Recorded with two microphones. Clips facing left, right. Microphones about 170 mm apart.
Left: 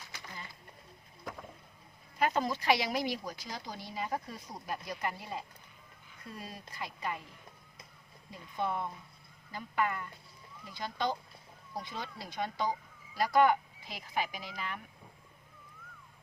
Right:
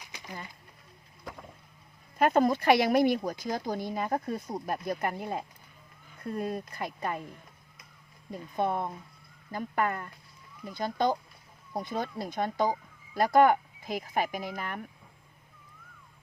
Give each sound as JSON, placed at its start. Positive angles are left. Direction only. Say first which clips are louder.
{"t": 0.0, "sound": "a sound", "louder": "right 4 dB", "side_deg": -15}
{"t": 1.2, "sound": "vehicle", "louder": "even", "side_deg": 0}
{"t": 2.1, "sound": "speech", "louder": "right 7 dB", "side_deg": -50}
{"t": 8.3, "sound": "speech", "louder": "right 5 dB", "side_deg": -50}